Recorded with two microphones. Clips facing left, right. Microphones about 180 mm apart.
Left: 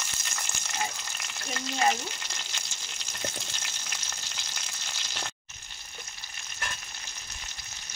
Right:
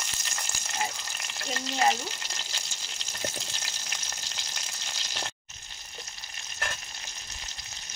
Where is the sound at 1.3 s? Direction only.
35° right (ahead or behind).